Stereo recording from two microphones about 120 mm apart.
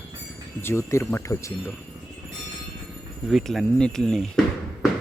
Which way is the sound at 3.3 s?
Centre (ahead or behind).